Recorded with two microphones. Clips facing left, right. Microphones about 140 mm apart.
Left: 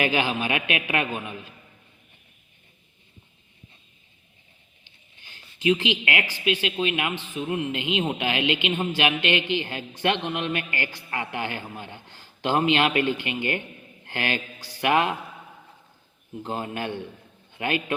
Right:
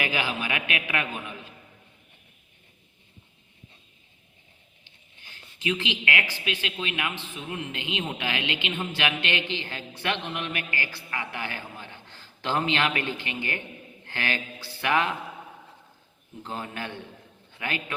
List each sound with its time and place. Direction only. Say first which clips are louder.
0.0 s a man's voice: left 5 dB; 20° left (ahead or behind)
5.2 s a man's voice: left 7 dB; 15° left (ahead or behind)
16.4 s a man's voice: left 5 dB; 20° left (ahead or behind)